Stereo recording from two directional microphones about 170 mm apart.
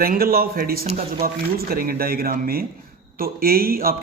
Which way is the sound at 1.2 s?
60° right (ahead or behind).